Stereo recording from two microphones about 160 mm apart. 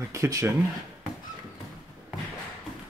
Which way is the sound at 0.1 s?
20° right (ahead or behind).